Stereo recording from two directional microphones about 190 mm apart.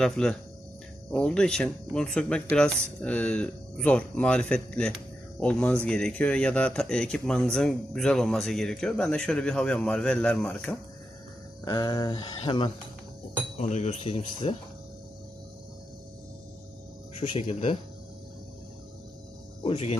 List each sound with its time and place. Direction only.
0.0 s speech: 5° left (ahead or behind)
11.6 s speech: 20° left (ahead or behind)
17.2 s speech: 30° left (ahead or behind)
19.6 s speech: 30° left (ahead or behind)